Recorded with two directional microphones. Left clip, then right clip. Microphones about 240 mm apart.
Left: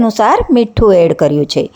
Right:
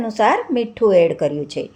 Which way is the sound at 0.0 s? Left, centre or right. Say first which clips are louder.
Left 6 dB; left.